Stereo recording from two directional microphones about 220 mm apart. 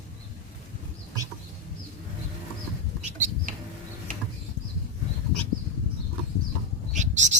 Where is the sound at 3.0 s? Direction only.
35° right (ahead or behind).